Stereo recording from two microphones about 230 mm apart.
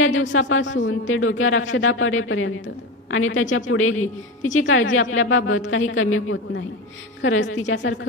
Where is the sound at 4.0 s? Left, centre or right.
Left.